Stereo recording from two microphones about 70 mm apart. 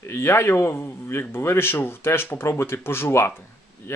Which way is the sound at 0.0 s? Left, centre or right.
Left.